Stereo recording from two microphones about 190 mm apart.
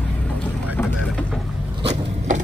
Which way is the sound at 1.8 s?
35° right (ahead or behind).